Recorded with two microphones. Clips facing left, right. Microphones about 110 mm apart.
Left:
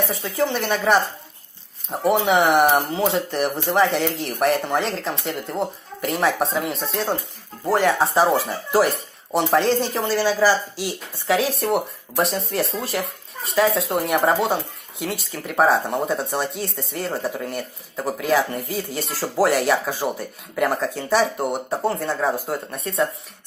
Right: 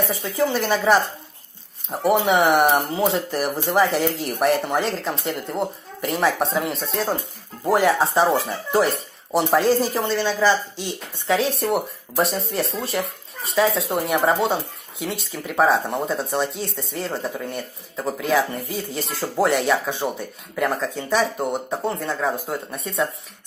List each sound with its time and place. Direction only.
0.0 s speech: centre (ahead or behind)